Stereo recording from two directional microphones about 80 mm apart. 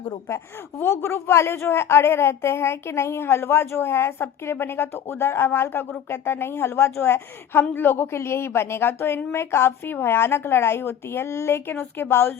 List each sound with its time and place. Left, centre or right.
0.3 s speech: left